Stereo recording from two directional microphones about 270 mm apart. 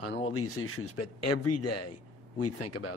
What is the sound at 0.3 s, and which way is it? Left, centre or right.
Speech, left.